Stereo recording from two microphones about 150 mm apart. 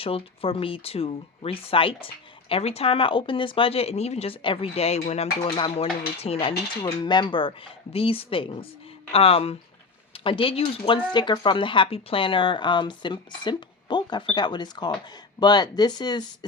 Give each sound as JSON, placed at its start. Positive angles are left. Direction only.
{"t": 0.0, "sound": "speech", "side_deg": 40}
{"t": 5.5, "sound": "speech", "side_deg": 35}
{"t": 6.8, "sound": "speech", "side_deg": 30}